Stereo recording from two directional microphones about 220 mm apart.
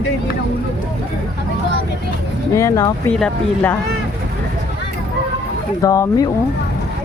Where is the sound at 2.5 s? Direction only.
15° left (ahead or behind).